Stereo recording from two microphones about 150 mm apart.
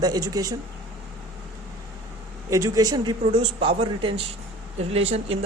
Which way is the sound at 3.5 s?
40° right (ahead or behind).